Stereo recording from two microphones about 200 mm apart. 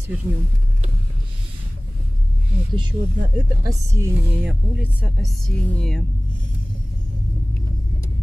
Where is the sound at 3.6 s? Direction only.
15° right (ahead or behind).